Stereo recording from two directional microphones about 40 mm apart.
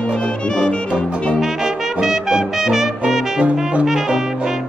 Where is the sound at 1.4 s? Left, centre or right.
Centre.